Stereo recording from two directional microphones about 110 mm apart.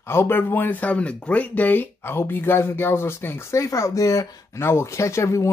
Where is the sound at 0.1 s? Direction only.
20° left (ahead or behind).